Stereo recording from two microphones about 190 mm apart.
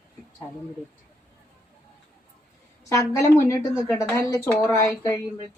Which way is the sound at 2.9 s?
15° left (ahead or behind).